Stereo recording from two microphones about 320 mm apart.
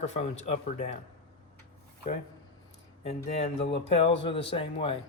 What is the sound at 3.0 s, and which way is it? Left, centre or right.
Speech, centre.